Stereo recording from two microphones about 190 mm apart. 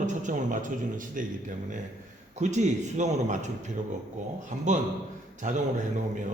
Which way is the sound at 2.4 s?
40° right (ahead or behind).